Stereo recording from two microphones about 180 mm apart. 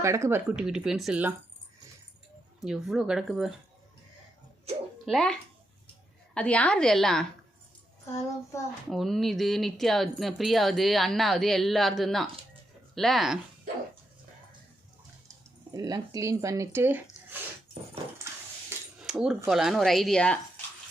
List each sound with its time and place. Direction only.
0.0 s speech: 15° right (ahead or behind)
2.6 s speech: centre (ahead or behind)
5.0 s speech: centre (ahead or behind)
8.0 s child singing: 15° left (ahead or behind)
8.9 s speech: centre (ahead or behind)
15.7 s speech: 20° right (ahead or behind)
19.0 s speech: 5° right (ahead or behind)